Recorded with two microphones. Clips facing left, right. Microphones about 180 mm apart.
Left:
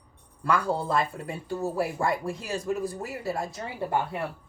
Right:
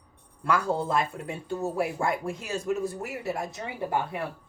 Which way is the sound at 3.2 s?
20° right (ahead or behind).